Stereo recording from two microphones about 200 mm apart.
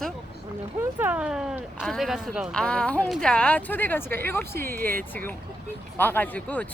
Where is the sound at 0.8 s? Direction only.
10° right (ahead or behind).